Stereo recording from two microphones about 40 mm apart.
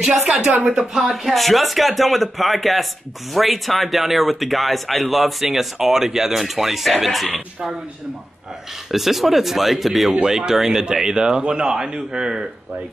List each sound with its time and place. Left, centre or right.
0.7 s speech: centre
1.1 s speech: centre
8.9 s speech: centre